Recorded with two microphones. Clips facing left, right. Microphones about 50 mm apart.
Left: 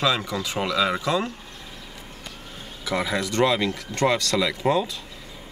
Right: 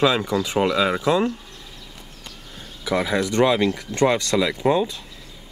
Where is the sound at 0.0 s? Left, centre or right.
Centre.